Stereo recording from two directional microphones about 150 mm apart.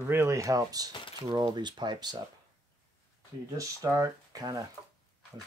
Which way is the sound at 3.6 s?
20° right (ahead or behind).